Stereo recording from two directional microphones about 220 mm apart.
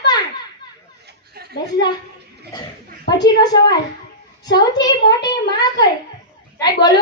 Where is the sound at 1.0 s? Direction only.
50° right (ahead or behind).